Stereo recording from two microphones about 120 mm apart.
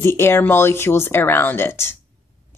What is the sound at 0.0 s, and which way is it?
Speech, 20° left (ahead or behind).